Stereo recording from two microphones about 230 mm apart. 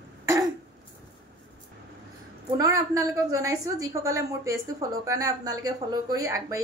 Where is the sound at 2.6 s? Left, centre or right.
Centre.